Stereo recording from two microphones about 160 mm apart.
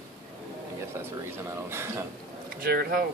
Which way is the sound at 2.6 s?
70° right (ahead or behind).